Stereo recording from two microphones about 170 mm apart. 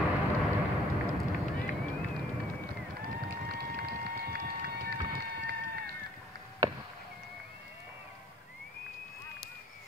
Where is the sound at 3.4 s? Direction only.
65° right (ahead or behind).